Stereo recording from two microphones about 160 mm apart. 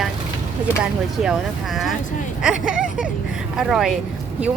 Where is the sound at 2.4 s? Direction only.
5° right (ahead or behind).